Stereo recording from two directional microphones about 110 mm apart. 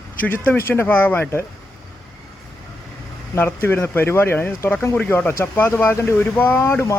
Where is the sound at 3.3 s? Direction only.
20° left (ahead or behind).